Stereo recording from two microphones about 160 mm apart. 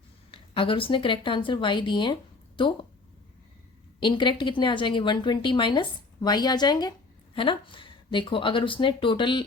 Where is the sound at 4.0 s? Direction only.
30° left (ahead or behind).